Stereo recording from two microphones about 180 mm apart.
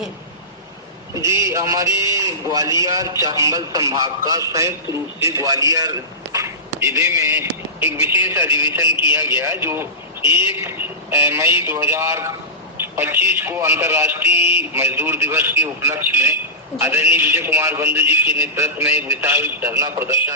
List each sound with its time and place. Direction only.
1.1 s a man's voice: 15° right (ahead or behind)